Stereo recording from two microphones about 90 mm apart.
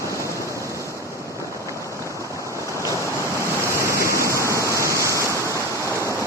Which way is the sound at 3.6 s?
35° right (ahead or behind).